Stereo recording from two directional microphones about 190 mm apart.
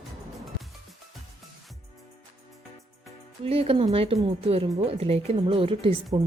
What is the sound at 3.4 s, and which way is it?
A woman's voice, 30° right (ahead or behind).